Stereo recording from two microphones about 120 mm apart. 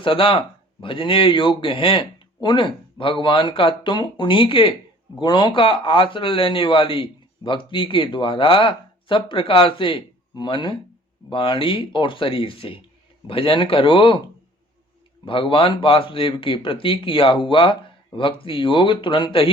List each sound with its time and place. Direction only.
0.0 s speech: 45° left (ahead or behind)
15.2 s speech: 45° left (ahead or behind)